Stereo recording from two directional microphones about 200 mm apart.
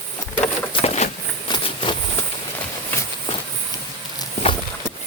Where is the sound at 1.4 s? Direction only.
25° left (ahead or behind).